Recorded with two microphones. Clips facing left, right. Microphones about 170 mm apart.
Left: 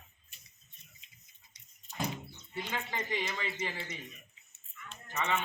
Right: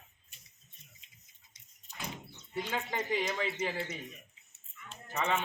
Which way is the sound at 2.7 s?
5° right (ahead or behind).